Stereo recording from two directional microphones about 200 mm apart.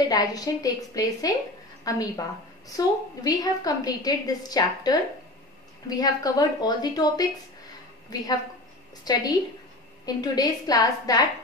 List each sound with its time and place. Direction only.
0.1 s a woman's voice: 20° left (ahead or behind)
3.3 s a woman's voice: 20° left (ahead or behind)